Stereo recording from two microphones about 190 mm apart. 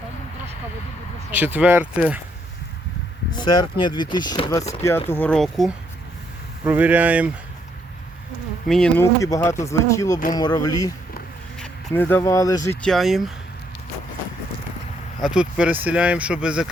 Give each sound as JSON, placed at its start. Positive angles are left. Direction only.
{"t": 1.3, "sound": "speech", "side_deg": -10}
{"t": 3.3, "sound": "speech", "side_deg": 20}
{"t": 8.6, "sound": "speech", "side_deg": 5}
{"t": 9.2, "sound": "speech", "side_deg": 15}
{"t": 12.8, "sound": "speech", "side_deg": 0}
{"t": 15.2, "sound": "speech", "side_deg": -5}